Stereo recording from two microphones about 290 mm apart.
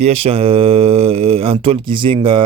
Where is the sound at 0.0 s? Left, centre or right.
Right.